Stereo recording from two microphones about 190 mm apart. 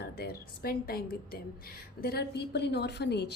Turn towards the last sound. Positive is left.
turn(degrees=60)  # may be behind; listen again after turning